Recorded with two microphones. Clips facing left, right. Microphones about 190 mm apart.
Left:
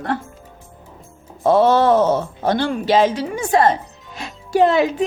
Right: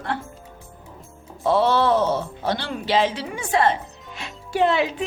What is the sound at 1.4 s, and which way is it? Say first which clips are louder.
Speech: left 5 dB; 45° left (ahead or behind).